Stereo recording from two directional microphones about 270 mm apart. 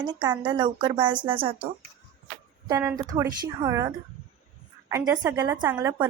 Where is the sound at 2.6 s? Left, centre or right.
Centre.